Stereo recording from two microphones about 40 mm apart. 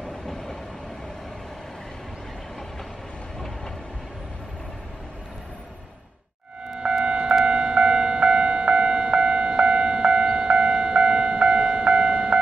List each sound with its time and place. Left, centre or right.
3.3 s train: centre
6.6 s music: right
7.4 s a sound: right